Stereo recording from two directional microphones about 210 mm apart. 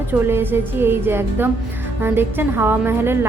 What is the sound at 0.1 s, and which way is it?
A woman's voice, 10° right (ahead or behind).